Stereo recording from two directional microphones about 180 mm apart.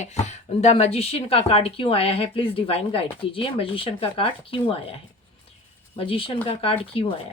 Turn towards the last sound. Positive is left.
turn(degrees=30)  # may be behind; listen again after turning